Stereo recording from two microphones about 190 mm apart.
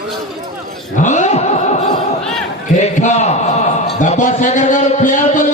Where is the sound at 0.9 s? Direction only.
40° left (ahead or behind).